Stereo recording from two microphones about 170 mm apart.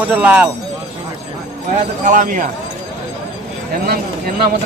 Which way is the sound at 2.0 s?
50° right (ahead or behind).